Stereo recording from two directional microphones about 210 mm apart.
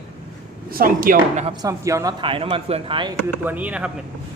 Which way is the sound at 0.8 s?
40° right (ahead or behind).